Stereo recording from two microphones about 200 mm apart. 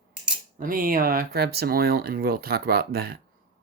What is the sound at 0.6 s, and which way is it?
Speech, 45° right (ahead or behind).